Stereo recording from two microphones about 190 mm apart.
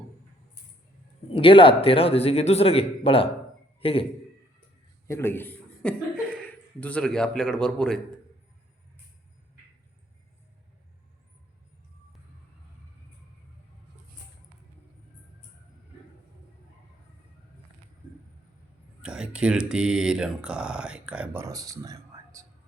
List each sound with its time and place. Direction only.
1.3 s a man's voice: 30° left (ahead or behind)
5.0 s speech: 15° left (ahead or behind)
19.0 s speech: 5° right (ahead or behind)
21.4 s a sound: 20° right (ahead or behind)